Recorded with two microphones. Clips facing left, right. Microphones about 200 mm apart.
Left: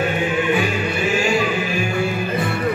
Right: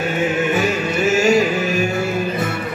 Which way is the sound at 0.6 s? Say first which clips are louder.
Right 2 dB; 45° right (ahead or behind).